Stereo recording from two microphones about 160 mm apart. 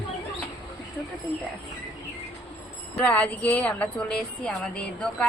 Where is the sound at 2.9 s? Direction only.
10° left (ahead or behind).